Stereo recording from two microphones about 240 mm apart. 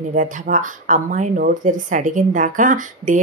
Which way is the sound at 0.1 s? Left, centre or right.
Right.